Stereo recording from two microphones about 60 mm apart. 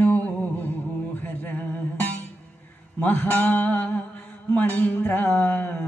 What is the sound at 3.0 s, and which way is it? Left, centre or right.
Mantra, left.